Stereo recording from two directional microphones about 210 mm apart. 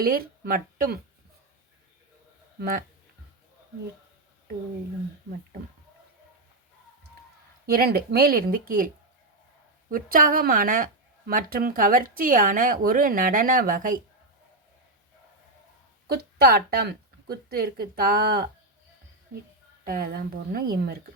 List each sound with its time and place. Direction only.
0.0 s speech: 45° right (ahead or behind)
2.6 s speech: 45° right (ahead or behind)
7.7 s speech: 45° right (ahead or behind)
9.9 s speech: 40° right (ahead or behind)
16.0 s speech: 45° right (ahead or behind)
19.8 s speech: 40° right (ahead or behind)